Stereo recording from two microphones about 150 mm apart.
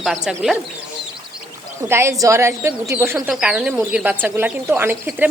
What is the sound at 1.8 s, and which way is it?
Speech, 15° right (ahead or behind).